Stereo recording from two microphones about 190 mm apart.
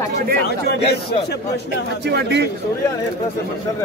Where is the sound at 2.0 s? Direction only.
60° right (ahead or behind).